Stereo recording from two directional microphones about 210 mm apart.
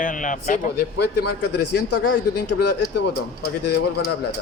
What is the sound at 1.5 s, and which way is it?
Speech, 90° left.